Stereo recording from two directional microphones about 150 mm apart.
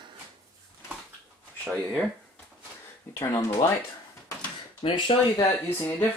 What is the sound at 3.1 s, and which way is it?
Speech, 20° left (ahead or behind).